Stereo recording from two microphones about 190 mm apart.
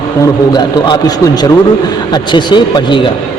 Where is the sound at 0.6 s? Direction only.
25° left (ahead or behind).